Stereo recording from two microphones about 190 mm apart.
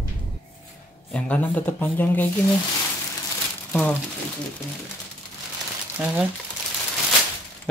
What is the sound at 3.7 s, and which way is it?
Speech, 5° left (ahead or behind).